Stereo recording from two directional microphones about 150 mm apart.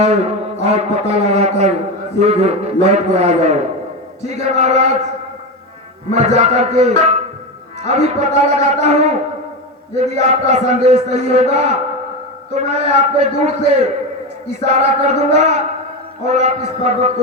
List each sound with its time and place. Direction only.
0.0 s a man's voice: 45° right (ahead or behind)
6.1 s a man's voice: 50° right (ahead or behind)